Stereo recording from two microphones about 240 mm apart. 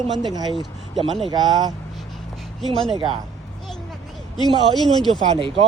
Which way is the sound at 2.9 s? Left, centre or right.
Right.